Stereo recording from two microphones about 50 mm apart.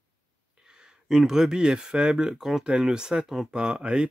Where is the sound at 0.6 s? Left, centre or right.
Centre.